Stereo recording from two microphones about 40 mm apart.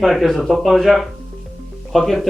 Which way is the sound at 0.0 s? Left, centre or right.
Centre.